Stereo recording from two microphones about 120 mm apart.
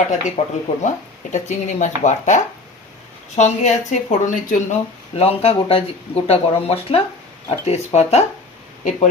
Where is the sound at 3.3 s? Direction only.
75° left (ahead or behind); by 4.6 s 90° left.